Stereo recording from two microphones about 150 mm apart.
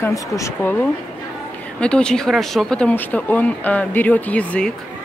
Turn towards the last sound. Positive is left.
turn(degrees=10)  # may be behind; listen again after turning